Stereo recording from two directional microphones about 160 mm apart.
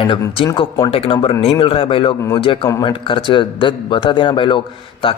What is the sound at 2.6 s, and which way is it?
Speech, 20° left (ahead or behind).